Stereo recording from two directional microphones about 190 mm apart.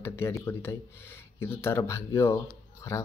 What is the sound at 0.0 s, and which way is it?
Speech, 15° left (ahead or behind).